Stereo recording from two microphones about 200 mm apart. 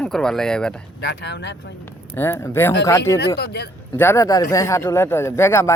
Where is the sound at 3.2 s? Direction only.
55° left (ahead or behind).